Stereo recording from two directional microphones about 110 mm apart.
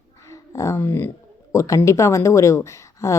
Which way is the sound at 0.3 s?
25° left (ahead or behind).